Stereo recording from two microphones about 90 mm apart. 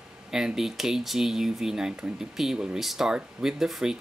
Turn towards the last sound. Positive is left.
turn(degrees=-5)  # may be behind; listen again after turning